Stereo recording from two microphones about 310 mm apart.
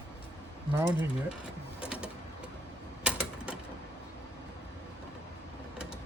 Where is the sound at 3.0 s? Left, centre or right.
Centre.